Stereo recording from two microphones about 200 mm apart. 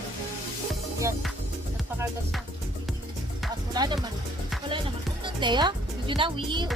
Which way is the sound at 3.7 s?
20° right (ahead or behind).